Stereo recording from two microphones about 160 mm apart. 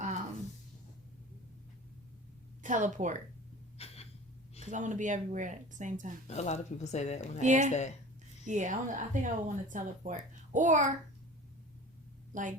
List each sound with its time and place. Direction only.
2.6 s speech: 50° right (ahead or behind)
3.8 s a sound: 40° left (ahead or behind)
4.7 s speech: 50° right (ahead or behind)
6.2 s a woman's voice: 45° left (ahead or behind)
7.4 s speech: 50° right (ahead or behind)
7.7 s a woman's voice: 45° left (ahead or behind)
8.4 s speech: 50° right (ahead or behind)
12.3 s a woman's voice: 50° right (ahead or behind)